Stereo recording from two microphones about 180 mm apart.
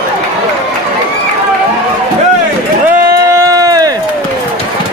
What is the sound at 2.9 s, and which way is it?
Run, 15° right (ahead or behind).